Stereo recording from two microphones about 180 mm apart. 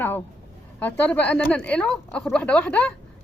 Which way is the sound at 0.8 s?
10° left (ahead or behind).